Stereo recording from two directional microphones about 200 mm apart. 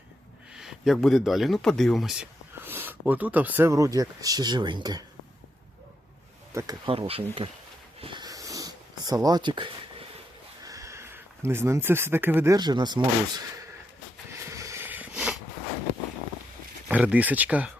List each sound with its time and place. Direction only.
0.5 s speech: centre (ahead or behind); by 5.0 s 20° right (ahead or behind)
6.5 s speech: 15° right (ahead or behind)
6.8 s speech: 25° right (ahead or behind)
7.9 s wheeze: 25° right (ahead or behind)
10.6 s speech: 15° right (ahead or behind)
14.3 s a sound: 15° right (ahead or behind)
16.9 s speech: 5° right (ahead or behind)